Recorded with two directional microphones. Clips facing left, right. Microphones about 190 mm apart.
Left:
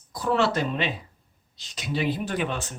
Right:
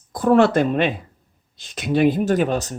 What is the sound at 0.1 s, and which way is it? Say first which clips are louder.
Speech: right 9 dB; 50° right (ahead or behind).